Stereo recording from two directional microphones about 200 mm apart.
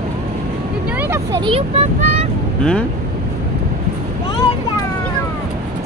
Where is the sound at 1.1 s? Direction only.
20° right (ahead or behind).